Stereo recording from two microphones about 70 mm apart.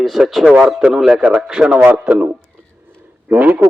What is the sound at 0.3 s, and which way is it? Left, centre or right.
A man's voice, centre.